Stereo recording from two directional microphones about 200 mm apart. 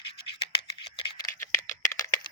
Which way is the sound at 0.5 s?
25° left (ahead or behind).